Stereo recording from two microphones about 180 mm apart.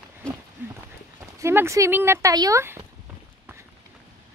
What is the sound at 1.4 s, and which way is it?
Speech, 15° right (ahead or behind).